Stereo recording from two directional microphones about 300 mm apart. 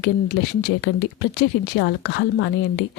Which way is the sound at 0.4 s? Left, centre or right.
Left.